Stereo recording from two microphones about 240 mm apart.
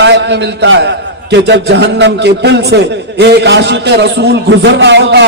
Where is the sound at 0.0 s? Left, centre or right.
Right.